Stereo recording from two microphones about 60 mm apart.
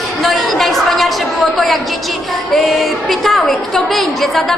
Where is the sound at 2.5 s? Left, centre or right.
Centre.